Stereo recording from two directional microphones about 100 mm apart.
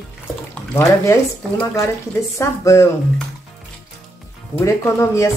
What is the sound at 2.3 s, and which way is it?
Speech, 30° left (ahead or behind).